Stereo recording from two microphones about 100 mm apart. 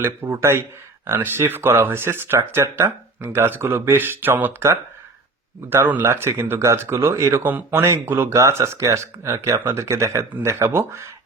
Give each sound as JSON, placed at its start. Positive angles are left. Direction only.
{"t": 0.0, "sound": "speech", "side_deg": -25}